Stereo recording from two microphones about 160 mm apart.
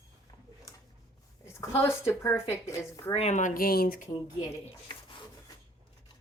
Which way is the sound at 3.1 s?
40° left (ahead or behind).